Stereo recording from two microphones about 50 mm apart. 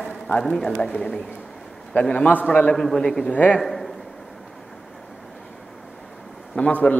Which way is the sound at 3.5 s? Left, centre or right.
Centre.